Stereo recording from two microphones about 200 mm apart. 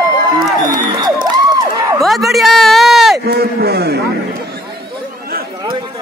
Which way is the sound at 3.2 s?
50° right (ahead or behind).